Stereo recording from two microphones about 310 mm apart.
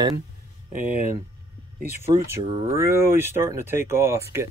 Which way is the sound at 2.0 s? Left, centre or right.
Centre.